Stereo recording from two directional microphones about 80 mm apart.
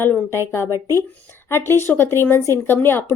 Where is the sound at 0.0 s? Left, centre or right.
Left.